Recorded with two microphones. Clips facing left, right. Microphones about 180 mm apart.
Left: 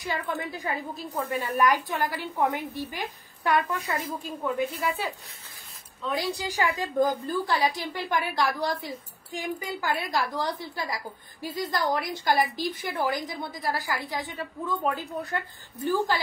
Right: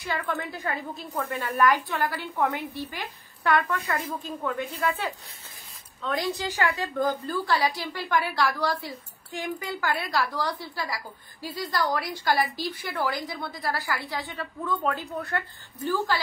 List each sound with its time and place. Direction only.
0.0 s a woman's voice: 15° left (ahead or behind)
6.0 s a woman's voice: 10° left (ahead or behind)